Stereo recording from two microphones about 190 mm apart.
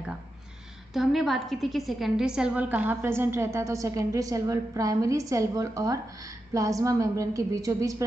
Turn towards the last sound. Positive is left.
turn(degrees=-15)  # may be behind; listen again after turning